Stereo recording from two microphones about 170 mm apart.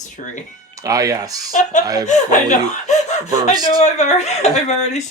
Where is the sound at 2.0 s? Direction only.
45° left (ahead or behind).